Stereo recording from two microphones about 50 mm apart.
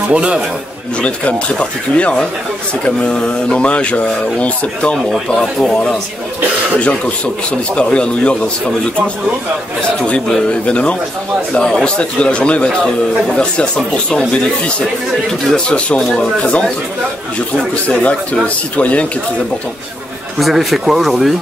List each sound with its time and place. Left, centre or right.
0.1 s speech: right
1.5 s speech: left
5.4 s speech: centre
7.7 s speech: left
9.8 s speech: left
12.6 s speech: centre
18.8 s speech: left
20.3 s speech: centre